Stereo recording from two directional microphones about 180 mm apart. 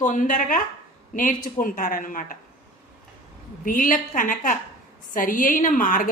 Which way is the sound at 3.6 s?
50° left (ahead or behind).